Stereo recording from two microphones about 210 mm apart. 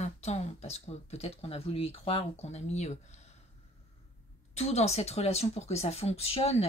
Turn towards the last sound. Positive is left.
turn(degrees=30)  # may be behind; listen again after turning